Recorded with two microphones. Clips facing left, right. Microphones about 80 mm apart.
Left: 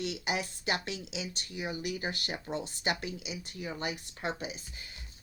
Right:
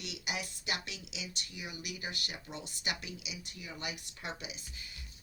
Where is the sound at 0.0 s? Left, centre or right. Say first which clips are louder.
Left 7 dB; left.